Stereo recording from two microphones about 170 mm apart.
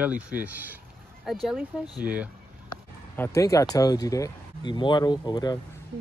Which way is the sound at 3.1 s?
15° left (ahead or behind).